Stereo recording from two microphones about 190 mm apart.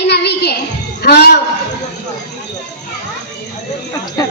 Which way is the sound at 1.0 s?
55° left (ahead or behind).